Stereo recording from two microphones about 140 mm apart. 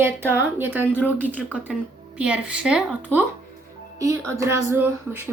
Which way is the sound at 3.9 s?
25° right (ahead or behind).